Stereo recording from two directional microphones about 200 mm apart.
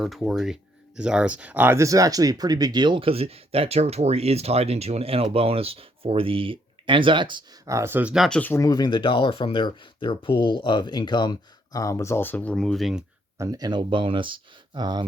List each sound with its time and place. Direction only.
0.0 s speech: centre (ahead or behind)
13.4 s speech: 15° right (ahead or behind)